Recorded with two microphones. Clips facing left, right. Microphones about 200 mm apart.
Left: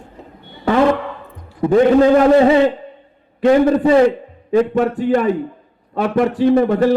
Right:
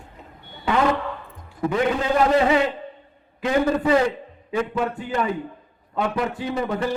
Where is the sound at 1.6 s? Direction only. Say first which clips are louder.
Left 11 dB; 40° left (ahead or behind).